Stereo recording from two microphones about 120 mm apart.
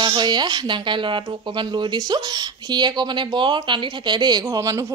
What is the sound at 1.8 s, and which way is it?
Speech, 35° right (ahead or behind).